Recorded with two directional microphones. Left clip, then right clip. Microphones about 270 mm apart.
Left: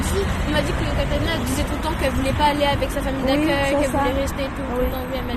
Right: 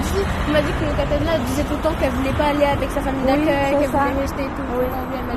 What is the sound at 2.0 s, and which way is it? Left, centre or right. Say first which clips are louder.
Speech: left 3 dB; left.